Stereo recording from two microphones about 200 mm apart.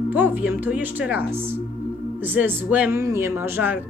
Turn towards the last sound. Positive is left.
turn(degrees=-10)  # may be behind; listen again after turning